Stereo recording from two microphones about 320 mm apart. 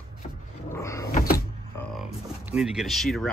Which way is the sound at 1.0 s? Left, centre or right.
Left.